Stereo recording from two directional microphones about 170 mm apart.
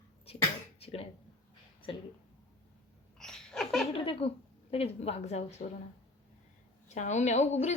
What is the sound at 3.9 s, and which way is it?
A woman's voice, 35° left (ahead or behind).